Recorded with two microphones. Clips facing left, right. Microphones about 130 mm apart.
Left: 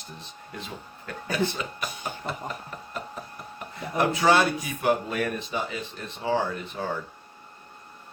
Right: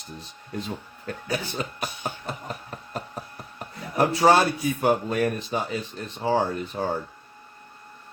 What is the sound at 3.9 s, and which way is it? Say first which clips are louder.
Speech: right 3 dB; 40° right (ahead or behind).